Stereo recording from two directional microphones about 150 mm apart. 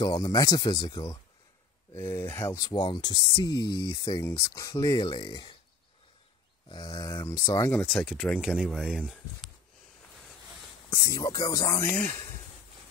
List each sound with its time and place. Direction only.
0.0 s speech: 25° left (ahead or behind)
2.0 s speech: 15° left (ahead or behind)
6.7 s speech: 25° left (ahead or behind)
8.0 s speech: centre (ahead or behind)
10.9 s speech: 25° left (ahead or behind)